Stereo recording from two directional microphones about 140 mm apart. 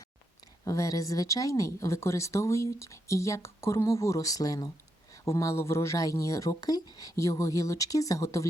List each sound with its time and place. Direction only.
0.6 s speech: 25° left (ahead or behind)